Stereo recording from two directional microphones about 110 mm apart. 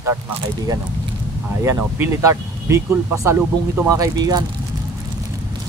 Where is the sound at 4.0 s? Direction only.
35° right (ahead or behind).